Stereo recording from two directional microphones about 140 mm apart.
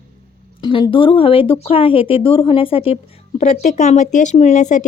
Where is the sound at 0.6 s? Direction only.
35° left (ahead or behind).